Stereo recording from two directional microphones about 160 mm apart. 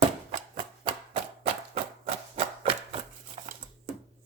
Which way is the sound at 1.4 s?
40° right (ahead or behind).